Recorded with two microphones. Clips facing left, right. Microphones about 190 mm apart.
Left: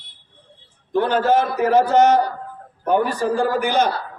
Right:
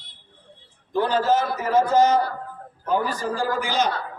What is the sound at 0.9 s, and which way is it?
A man's voice, 55° left (ahead or behind).